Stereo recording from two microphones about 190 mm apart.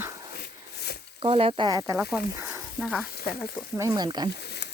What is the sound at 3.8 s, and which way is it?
Speech, 20° right (ahead or behind).